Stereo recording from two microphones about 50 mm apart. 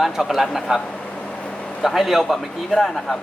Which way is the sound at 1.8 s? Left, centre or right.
Centre.